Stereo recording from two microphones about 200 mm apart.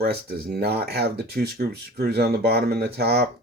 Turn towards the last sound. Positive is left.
turn(degrees=-50)  # may be behind; listen again after turning